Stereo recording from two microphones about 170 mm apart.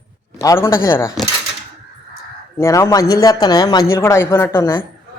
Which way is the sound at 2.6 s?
15° left (ahead or behind).